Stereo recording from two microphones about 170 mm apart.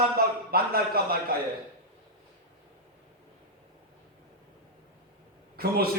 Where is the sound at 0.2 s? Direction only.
65° right (ahead or behind).